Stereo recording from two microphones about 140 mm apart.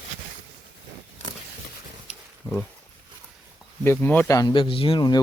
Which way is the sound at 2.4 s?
20° left (ahead or behind).